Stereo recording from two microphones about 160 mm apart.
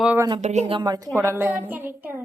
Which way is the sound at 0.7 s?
25° right (ahead or behind).